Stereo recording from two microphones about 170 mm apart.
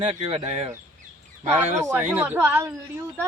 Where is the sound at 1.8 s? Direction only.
10° right (ahead or behind).